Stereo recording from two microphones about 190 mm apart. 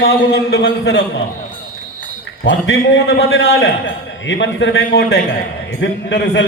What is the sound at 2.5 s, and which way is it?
A man's voice, 80° left.